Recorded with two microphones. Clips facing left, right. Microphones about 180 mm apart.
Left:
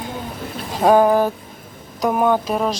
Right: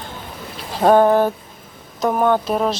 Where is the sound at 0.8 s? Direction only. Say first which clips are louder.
Right 1 dB; 5° left (ahead or behind).